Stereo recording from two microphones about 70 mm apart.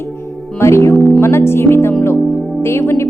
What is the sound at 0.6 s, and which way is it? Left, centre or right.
Speech, left.